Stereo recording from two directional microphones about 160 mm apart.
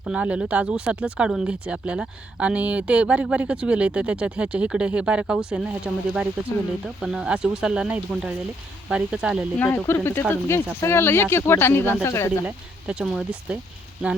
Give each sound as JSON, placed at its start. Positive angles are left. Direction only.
{"t": 0.0, "sound": "speech", "side_deg": -10}
{"t": 9.6, "sound": "speech", "side_deg": 10}
{"t": 12.5, "sound": "speech", "side_deg": -5}